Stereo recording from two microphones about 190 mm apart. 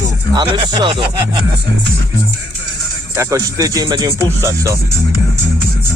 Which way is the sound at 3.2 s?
15° right (ahead or behind).